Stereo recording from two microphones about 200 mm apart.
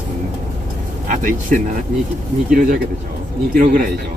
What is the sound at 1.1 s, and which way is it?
Speech, 45° right (ahead or behind).